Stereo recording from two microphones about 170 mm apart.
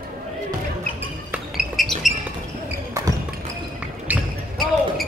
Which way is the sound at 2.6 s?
20° right (ahead or behind).